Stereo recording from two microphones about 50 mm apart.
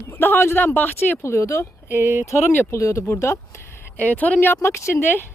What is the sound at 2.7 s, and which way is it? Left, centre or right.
Speech, left.